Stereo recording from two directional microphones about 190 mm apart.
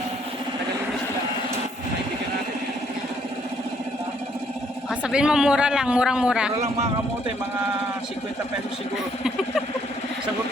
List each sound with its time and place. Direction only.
4.9 s a man's voice: 5° right (ahead or behind)
6.6 s speech: 35° right (ahead or behind)